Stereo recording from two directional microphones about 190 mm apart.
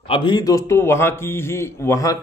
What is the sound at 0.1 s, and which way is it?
A man's voice, 25° left (ahead or behind).